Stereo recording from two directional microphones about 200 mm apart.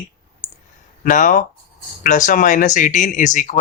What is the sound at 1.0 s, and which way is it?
Speech, 40° left (ahead or behind).